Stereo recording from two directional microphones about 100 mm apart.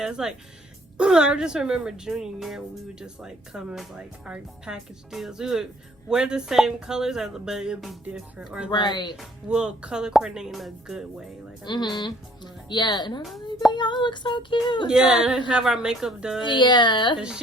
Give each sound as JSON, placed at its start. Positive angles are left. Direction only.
{"t": 0.0, "sound": "speech", "side_deg": -5}
{"t": 8.7, "sound": "music", "side_deg": 45}
{"t": 9.1, "sound": "speech", "side_deg": -10}
{"t": 11.6, "sound": "music", "side_deg": 45}
{"t": 14.8, "sound": "speech", "side_deg": -10}
{"t": 16.4, "sound": "music", "side_deg": 50}
{"t": 17.2, "sound": "speech", "side_deg": -10}